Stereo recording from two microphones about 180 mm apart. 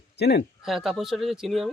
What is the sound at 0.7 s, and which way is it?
Speech, centre (ahead or behind).